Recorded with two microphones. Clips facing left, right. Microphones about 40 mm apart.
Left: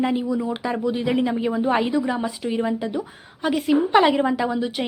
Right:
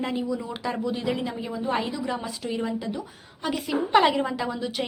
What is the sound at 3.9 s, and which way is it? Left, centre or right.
Speech, centre.